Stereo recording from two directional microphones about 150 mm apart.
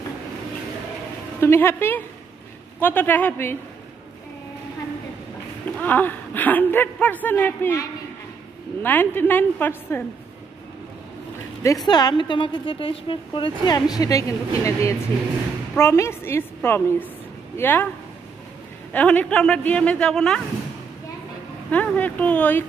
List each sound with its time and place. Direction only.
1.4 s speech: 15° left (ahead or behind)
5.8 s speech: 10° left (ahead or behind)
11.6 s a woman's voice: 25° left (ahead or behind)
18.9 s speech: 10° left (ahead or behind)
21.6 s speech: 10° left (ahead or behind)